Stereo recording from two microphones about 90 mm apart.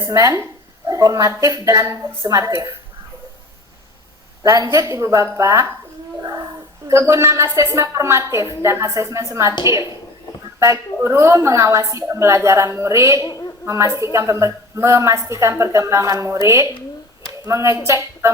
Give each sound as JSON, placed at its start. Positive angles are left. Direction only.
{"t": 0.1, "sound": "a woman's voice", "side_deg": -35}
{"t": 2.4, "sound": "a woman's voice", "side_deg": -30}
{"t": 4.4, "sound": "a woman's voice", "side_deg": -40}
{"t": 10.6, "sound": "a woman's voice", "side_deg": -35}